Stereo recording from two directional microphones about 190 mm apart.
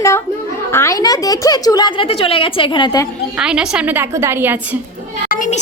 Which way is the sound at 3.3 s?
5° right (ahead or behind).